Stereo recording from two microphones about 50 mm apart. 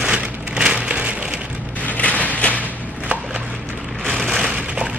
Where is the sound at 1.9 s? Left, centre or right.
Left.